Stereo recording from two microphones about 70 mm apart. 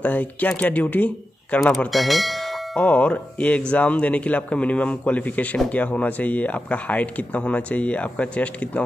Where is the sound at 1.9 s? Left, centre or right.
Centre.